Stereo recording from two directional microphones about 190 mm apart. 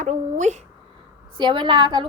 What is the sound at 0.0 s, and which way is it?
Speech, 40° right (ahead or behind).